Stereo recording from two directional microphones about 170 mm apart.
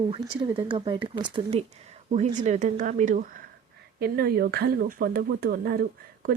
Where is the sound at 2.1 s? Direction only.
45° right (ahead or behind).